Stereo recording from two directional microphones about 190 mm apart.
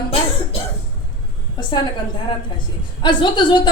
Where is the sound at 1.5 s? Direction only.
25° left (ahead or behind).